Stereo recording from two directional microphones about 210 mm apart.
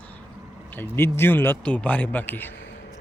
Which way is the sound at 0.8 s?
10° left (ahead or behind).